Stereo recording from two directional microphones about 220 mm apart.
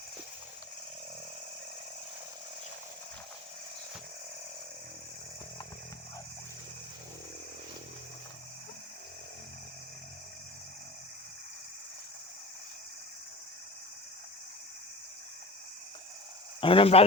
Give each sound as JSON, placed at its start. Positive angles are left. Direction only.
{"t": 16.6, "sound": "speech", "side_deg": 25}